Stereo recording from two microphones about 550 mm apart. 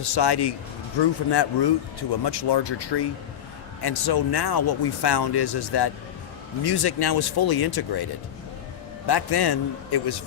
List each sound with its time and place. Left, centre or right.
0.0 s speech: left